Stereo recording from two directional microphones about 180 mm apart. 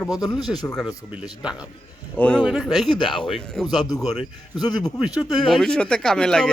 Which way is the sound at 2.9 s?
25° left (ahead or behind).